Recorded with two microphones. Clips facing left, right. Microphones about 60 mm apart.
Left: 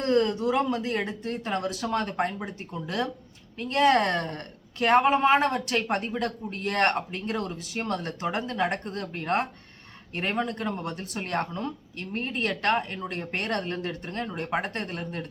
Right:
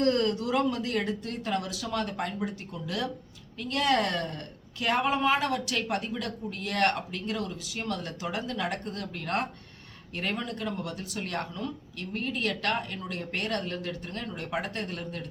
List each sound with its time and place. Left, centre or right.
0.0 s a woman's voice: left